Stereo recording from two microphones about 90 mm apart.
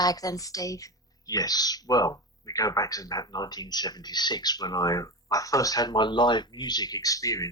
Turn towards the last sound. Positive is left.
turn(degrees=40)  # may be behind; listen again after turning